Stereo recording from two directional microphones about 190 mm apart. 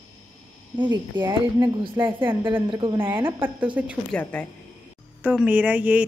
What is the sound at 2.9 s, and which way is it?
A woman's voice, 10° right (ahead or behind).